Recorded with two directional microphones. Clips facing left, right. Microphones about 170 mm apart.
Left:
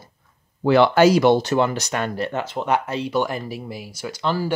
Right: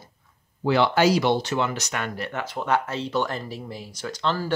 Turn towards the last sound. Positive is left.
turn(degrees=10)  # may be behind; listen again after turning